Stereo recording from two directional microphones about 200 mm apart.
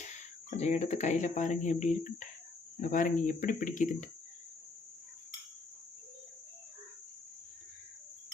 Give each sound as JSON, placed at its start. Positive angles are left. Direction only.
{"t": 0.5, "sound": "speech", "side_deg": 35}